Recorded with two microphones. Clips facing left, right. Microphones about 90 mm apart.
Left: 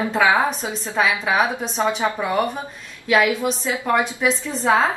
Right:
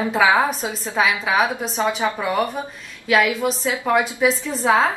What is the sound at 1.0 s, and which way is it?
Speech, 5° right (ahead or behind).